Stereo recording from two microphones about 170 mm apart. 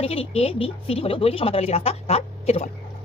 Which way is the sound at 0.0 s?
35° left (ahead or behind).